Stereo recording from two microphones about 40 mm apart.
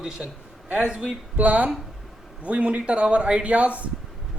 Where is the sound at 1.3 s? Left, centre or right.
Right.